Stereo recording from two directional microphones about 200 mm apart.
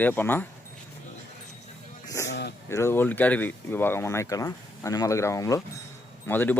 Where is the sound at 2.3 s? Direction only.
55° left (ahead or behind).